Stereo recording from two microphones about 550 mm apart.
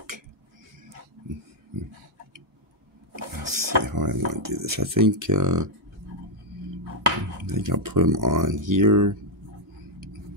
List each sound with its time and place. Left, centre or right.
3.4 s speech: right
7.4 s speech: right